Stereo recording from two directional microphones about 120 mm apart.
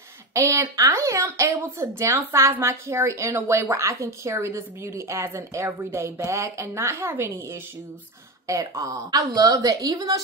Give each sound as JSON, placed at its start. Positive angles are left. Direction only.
{"t": 0.3, "sound": "speech", "side_deg": -25}
{"t": 8.5, "sound": "a woman's voice", "side_deg": -25}